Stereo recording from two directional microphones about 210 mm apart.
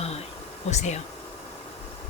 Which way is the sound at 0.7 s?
35° left (ahead or behind).